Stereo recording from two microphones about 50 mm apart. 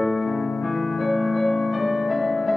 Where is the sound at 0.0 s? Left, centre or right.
Centre.